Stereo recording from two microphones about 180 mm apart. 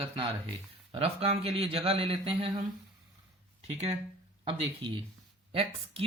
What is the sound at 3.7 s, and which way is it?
Speech, 35° right (ahead or behind).